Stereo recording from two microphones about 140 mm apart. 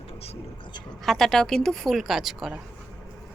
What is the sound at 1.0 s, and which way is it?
Speech, 5° left (ahead or behind).